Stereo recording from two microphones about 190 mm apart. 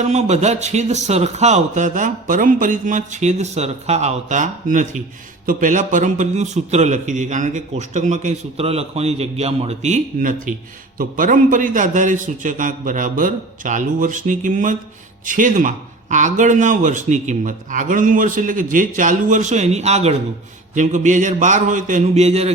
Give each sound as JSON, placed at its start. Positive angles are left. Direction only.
{"t": 0.0, "sound": "a man's voice", "side_deg": -35}